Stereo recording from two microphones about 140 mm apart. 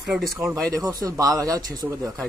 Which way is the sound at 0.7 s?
25° right (ahead or behind).